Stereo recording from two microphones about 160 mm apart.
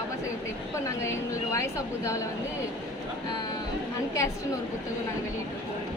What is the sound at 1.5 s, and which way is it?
Speech, 20° left (ahead or behind).